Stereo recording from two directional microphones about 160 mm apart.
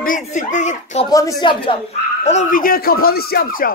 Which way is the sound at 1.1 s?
25° left (ahead or behind).